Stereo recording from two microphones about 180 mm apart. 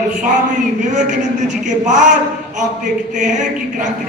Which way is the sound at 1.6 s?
45° right (ahead or behind).